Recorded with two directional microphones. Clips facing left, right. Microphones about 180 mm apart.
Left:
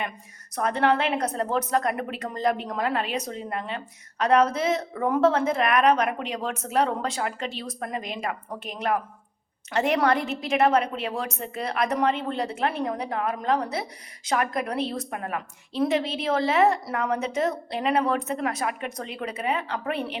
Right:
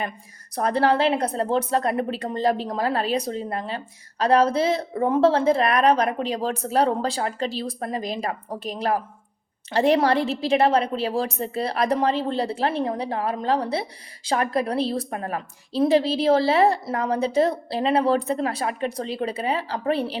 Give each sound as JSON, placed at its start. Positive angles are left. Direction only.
{"t": 0.5, "sound": "a woman's voice", "side_deg": -35}